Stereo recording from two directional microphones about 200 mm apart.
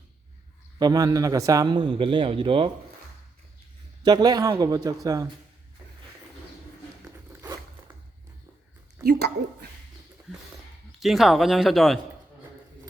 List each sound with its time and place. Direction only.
0.8 s a man's voice: 20° right (ahead or behind)
4.0 s a man's voice: 20° right (ahead or behind)
9.0 s a woman's voice: 55° right (ahead or behind)
11.0 s speech: centre (ahead or behind)